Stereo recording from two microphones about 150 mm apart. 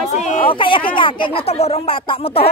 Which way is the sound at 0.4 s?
35° left (ahead or behind).